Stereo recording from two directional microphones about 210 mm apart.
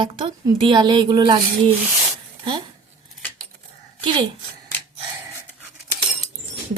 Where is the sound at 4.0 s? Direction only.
20° right (ahead or behind).